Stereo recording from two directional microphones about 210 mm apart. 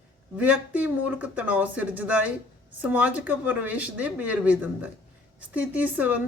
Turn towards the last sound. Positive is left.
turn(degrees=-5)  # may be behind; listen again after turning